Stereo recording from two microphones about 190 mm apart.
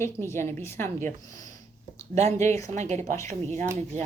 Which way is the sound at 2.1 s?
35° right (ahead or behind).